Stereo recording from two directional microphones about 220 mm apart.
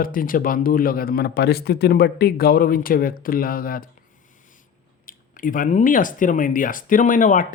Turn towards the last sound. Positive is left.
turn(degrees=35)  # may be behind; listen again after turning